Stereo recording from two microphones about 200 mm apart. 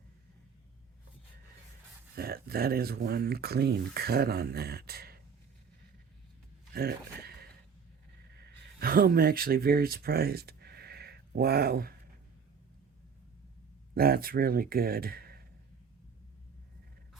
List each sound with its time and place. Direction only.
2.1 s speech: 50° right (ahead or behind)
6.7 s a sound: 50° right (ahead or behind)
8.4 s speech: 50° right (ahead or behind)
13.9 s speech: 50° right (ahead or behind)